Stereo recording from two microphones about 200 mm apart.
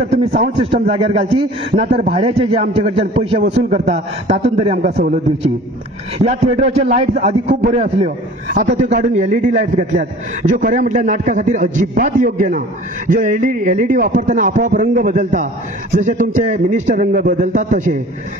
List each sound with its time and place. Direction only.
0.1 s a man's voice: 35° right (ahead or behind)